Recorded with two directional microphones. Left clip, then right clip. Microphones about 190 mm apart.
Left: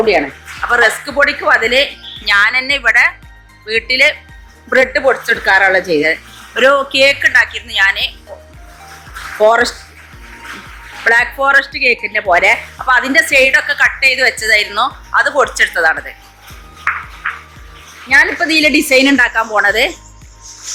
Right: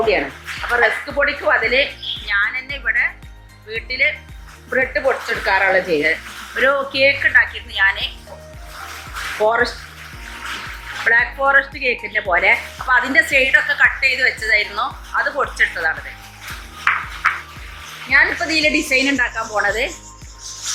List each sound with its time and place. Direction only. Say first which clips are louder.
0.8 s speech: left 5 dB; 50° left (ahead or behind)
9.4 s speech: left 7 dB; 45° left (ahead or behind)
11.0 s speech: left 4 dB; 45° left (ahead or behind)
18.1 s speech: left 5 dB; 50° left (ahead or behind)